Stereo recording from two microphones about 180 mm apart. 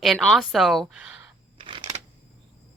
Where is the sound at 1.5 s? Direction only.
30° right (ahead or behind).